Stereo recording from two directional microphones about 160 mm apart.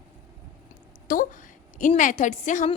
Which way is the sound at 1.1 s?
55° left (ahead or behind).